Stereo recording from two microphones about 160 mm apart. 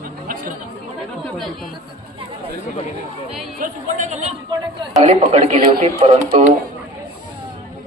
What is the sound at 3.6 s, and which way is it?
Speech, 50° right (ahead or behind).